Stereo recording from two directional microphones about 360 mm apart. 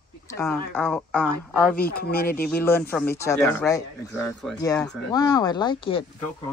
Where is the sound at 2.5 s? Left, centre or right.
Centre.